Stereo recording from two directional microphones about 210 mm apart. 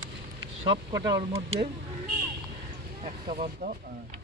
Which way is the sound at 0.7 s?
20° right (ahead or behind).